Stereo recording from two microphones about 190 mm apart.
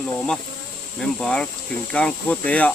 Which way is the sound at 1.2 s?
5° left (ahead or behind).